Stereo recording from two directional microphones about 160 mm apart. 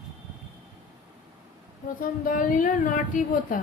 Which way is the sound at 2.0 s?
60° left (ahead or behind).